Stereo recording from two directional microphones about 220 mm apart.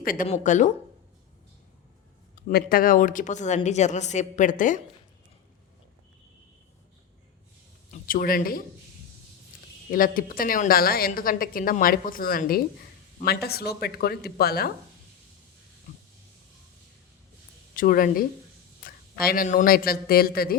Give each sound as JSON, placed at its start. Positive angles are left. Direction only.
{"t": 0.0, "sound": "a woman's voice", "side_deg": 40}
{"t": 2.3, "sound": "a woman's voice", "side_deg": 45}
{"t": 7.9, "sound": "speech", "side_deg": 40}
{"t": 9.9, "sound": "a woman's voice", "side_deg": 40}
{"t": 17.7, "sound": "a woman's voice", "side_deg": 40}